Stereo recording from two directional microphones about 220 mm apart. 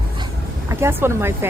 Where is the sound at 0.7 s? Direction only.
10° right (ahead or behind).